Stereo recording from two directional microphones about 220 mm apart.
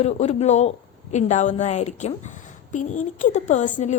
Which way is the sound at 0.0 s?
30° left (ahead or behind).